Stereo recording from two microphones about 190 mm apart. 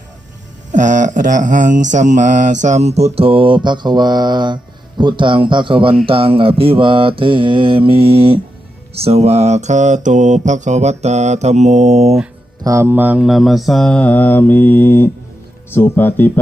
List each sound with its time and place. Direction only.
0.7 s mantra: 40° right (ahead or behind)
12.6 s mantra: 15° right (ahead or behind); by 15.1 s 10° left (ahead or behind)
15.7 s speech: 10° left (ahead or behind)